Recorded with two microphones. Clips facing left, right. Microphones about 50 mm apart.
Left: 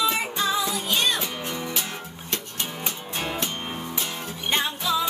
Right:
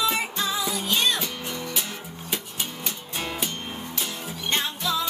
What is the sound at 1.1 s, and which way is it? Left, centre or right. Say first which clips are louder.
Music: left 1 dB; centre.